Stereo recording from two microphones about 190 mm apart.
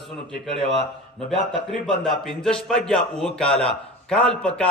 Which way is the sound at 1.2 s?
Centre (ahead or behind).